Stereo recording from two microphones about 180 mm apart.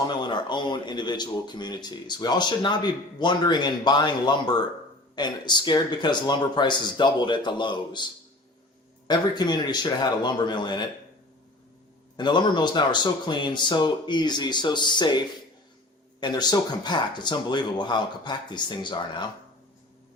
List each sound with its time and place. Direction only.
0.1 s speech: 25° left (ahead or behind)
12.1 s speech: 25° left (ahead or behind)
16.2 s speech: 20° left (ahead or behind)